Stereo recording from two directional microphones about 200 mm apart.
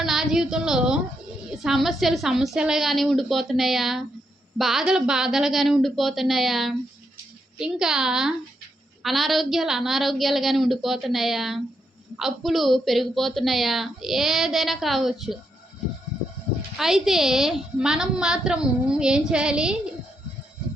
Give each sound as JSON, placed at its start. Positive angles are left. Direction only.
{"t": 0.0, "sound": "a woman's voice", "side_deg": 0}
{"t": 16.7, "sound": "a woman's voice", "side_deg": 0}